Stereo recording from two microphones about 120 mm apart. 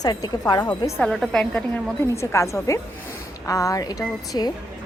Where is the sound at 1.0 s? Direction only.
Centre (ahead or behind).